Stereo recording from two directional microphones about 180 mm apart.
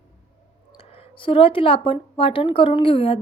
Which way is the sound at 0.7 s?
30° left (ahead or behind).